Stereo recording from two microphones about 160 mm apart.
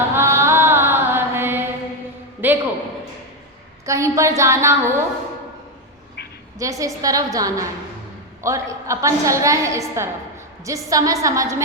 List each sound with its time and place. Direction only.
0.1 s chant: 15° right (ahead or behind)
2.4 s a sound: 10° right (ahead or behind)
3.8 s a woman's voice: 20° right (ahead or behind)
6.6 s a woman's voice: 20° right (ahead or behind)